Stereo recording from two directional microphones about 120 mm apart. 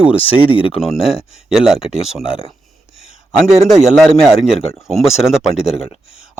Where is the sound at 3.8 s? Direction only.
5° right (ahead or behind).